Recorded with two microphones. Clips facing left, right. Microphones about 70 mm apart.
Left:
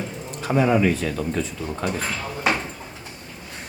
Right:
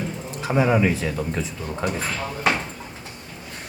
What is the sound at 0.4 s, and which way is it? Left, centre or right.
Speech, centre.